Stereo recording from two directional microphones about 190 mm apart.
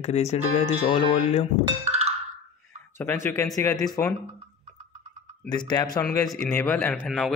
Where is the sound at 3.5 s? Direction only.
20° left (ahead or behind).